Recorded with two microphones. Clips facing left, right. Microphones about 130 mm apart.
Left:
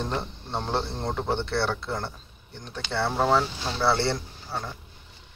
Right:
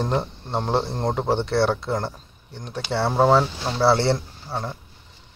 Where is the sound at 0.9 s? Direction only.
45° right (ahead or behind).